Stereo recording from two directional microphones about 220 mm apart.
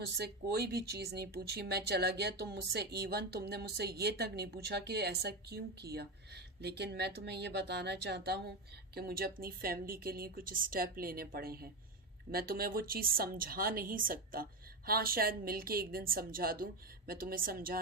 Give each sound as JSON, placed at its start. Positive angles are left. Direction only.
{"t": 0.2, "sound": "a woman's voice", "side_deg": -45}